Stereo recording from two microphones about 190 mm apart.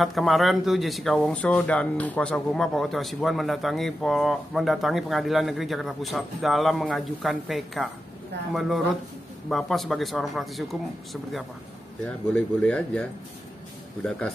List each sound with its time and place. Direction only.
0.0 s speech: centre (ahead or behind)
12.0 s speech: 5° left (ahead or behind)